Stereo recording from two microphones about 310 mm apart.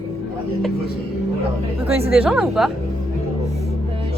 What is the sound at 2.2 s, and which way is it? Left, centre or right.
Music, centre.